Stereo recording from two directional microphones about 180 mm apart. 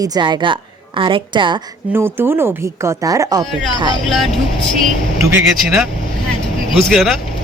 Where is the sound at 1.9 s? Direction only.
15° right (ahead or behind).